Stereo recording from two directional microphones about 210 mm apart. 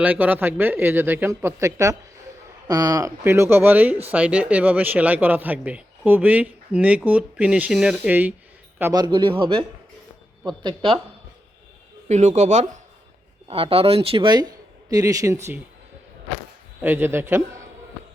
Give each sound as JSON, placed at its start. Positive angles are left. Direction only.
{"t": 0.0, "sound": "speech", "side_deg": -5}
{"t": 8.8, "sound": "speech", "side_deg": -20}
{"t": 12.0, "sound": "speech", "side_deg": -35}
{"t": 16.8, "sound": "speech", "side_deg": -10}